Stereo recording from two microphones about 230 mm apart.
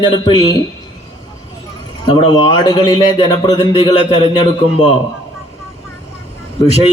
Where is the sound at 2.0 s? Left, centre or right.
Centre.